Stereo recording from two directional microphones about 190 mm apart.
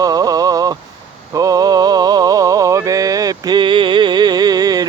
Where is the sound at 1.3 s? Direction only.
20° right (ahead or behind).